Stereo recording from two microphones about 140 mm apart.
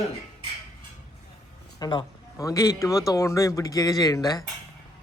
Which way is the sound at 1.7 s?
25° left (ahead or behind).